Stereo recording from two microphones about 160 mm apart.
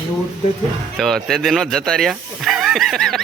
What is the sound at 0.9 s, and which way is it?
Speech, centre (ahead or behind).